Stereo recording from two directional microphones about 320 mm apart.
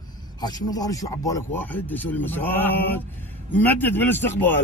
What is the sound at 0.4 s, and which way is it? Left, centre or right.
Speech, centre.